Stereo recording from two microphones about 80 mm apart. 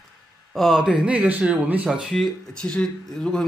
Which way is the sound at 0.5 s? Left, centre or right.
Centre.